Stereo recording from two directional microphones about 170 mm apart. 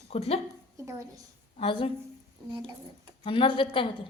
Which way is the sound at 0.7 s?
20° right (ahead or behind).